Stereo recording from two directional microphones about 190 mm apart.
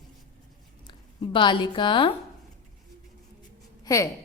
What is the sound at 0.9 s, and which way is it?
Speech, 25° left (ahead or behind).